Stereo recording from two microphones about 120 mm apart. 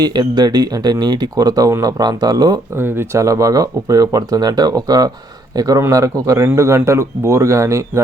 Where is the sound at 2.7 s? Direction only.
20° right (ahead or behind).